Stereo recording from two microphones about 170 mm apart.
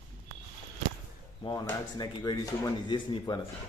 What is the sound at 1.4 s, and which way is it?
Speech, 20° left (ahead or behind).